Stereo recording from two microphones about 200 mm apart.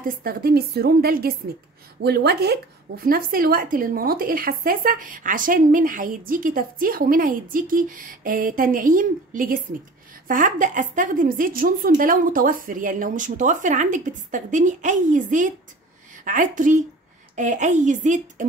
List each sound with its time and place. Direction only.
0.1 s a woman's voice: 45° right (ahead or behind)